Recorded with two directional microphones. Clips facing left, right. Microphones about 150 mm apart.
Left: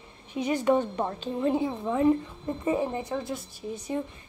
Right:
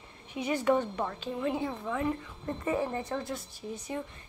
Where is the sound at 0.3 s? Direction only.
20° left (ahead or behind).